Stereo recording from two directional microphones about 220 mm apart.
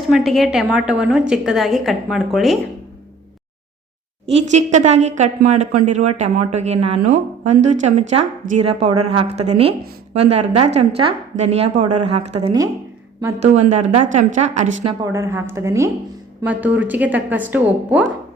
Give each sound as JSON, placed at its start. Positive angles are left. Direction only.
{"t": 0.1, "sound": "a woman's voice", "side_deg": 0}
{"t": 4.3, "sound": "a woman's voice", "side_deg": -30}
{"t": 15.1, "sound": "a woman's voice", "side_deg": -10}